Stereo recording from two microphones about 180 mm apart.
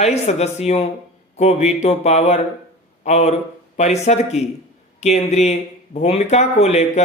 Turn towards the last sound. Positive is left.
turn(degrees=35)  # may be behind; listen again after turning